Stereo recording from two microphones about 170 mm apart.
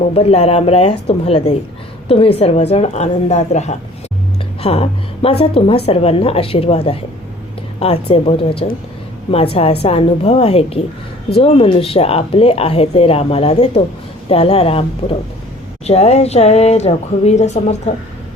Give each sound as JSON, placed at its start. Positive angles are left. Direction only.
{"t": 0.1, "sound": "speech", "side_deg": 35}